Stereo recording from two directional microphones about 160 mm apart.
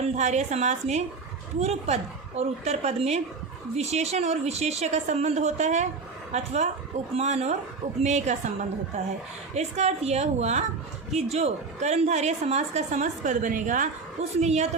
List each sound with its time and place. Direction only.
0.0 s a woman's voice: 45° right (ahead or behind)
9.6 s a woman's voice: 45° right (ahead or behind)